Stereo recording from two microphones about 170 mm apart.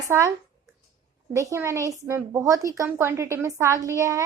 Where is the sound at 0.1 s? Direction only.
15° right (ahead or behind).